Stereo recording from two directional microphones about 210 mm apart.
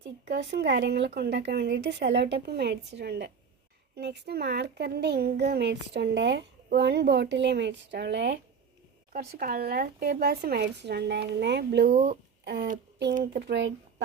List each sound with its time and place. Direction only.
0.0 s speech: 55° right (ahead or behind)